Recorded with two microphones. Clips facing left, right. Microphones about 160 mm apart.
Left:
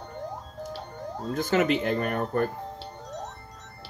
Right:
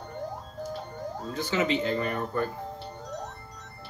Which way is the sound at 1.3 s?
50° left (ahead or behind).